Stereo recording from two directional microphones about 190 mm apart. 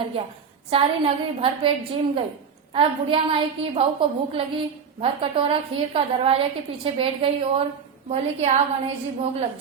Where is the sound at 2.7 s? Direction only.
30° right (ahead or behind).